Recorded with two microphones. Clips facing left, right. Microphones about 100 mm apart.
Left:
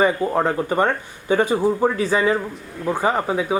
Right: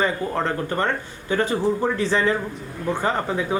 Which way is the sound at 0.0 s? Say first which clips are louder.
Left 5 dB; 15° left (ahead or behind).